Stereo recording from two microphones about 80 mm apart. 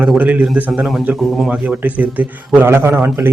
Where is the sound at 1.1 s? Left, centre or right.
Centre.